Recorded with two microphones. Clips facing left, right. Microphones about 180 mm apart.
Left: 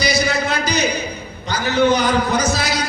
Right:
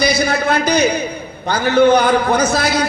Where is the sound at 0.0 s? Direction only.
55° right (ahead or behind).